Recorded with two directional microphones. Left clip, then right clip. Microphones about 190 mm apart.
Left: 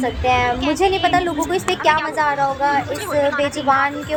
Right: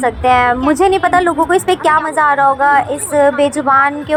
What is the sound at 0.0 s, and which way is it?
A woman's voice, 15° right (ahead or behind).